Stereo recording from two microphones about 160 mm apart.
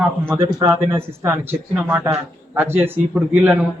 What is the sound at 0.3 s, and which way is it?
A man's voice, 15° right (ahead or behind).